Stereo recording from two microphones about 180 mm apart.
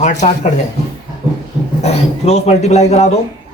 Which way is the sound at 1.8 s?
35° left (ahead or behind).